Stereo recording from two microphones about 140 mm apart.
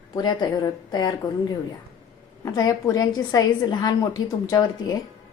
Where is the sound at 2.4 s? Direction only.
25° left (ahead or behind).